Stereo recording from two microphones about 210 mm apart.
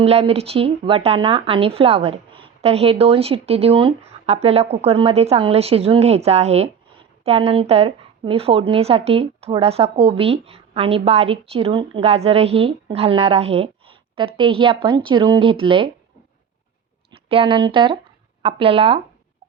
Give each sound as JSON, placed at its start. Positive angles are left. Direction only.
{"t": 0.0, "sound": "speech", "side_deg": -30}
{"t": 17.1, "sound": "speech", "side_deg": -25}